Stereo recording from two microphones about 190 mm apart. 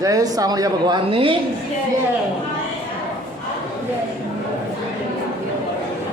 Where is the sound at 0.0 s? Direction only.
20° right (ahead or behind).